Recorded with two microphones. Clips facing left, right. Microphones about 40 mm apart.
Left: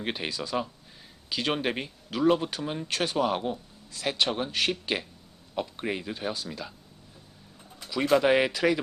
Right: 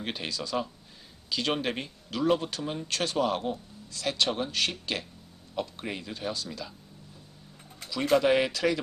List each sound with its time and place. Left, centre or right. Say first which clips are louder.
0.0 s speech: left 2 dB; centre
8.0 s speech: left 1 dB; centre